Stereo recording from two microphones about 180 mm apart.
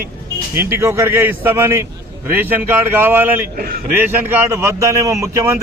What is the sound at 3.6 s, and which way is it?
Speech, 55° right (ahead or behind).